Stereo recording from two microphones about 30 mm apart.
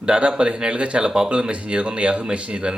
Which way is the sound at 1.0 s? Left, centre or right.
Right.